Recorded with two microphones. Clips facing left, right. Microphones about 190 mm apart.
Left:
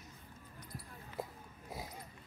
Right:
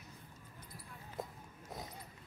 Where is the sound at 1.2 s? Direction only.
10° left (ahead or behind).